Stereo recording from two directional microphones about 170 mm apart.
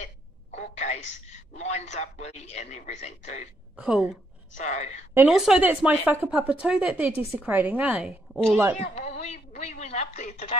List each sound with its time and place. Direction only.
0.0 s a sound: 45° left (ahead or behind)
1.6 s speech: 40° left (ahead or behind)
3.7 s a woman's voice: 5° right (ahead or behind)
4.6 s a woman's voice: 45° left (ahead or behind)
5.1 s speech: 5° right (ahead or behind)
8.7 s speech: 40° left (ahead or behind)